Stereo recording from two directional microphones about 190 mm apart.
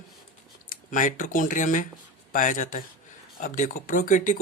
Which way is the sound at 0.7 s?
45° left (ahead or behind).